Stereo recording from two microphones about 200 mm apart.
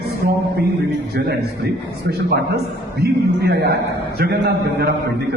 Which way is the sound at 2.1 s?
55° right (ahead or behind).